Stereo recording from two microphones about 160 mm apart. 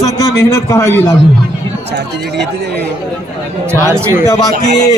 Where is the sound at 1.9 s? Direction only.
90° right.